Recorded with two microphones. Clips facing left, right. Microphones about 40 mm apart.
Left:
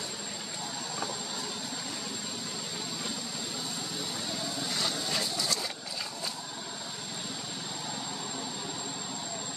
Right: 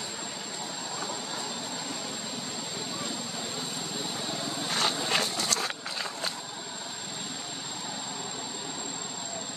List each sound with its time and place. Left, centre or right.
4.3 s vehicle: right
4.6 s vehicle: right
5.1 s a sound: right